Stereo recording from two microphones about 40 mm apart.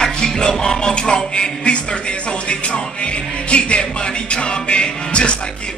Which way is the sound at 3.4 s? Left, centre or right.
Left.